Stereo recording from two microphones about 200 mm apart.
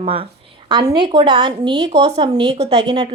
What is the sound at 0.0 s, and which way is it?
A woman's voice, 25° right (ahead or behind).